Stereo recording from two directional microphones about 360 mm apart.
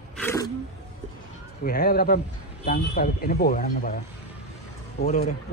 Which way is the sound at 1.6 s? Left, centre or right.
Left.